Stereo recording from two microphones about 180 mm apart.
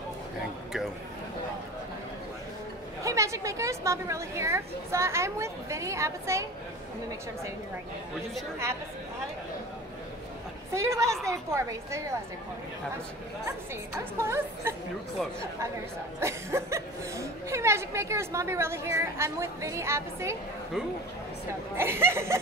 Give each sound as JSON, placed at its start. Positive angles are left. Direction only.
{"t": 3.0, "sound": "speech", "side_deg": -15}
{"t": 10.7, "sound": "speech", "side_deg": -15}
{"t": 13.5, "sound": "speech", "side_deg": -15}
{"t": 16.2, "sound": "speech", "side_deg": -15}
{"t": 21.7, "sound": "speech", "side_deg": -15}